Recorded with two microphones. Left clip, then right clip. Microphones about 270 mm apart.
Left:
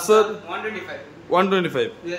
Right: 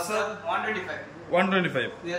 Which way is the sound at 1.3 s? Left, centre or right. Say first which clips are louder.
Left 5 dB; centre.